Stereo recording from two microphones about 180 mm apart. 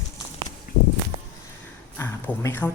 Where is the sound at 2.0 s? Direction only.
10° left (ahead or behind).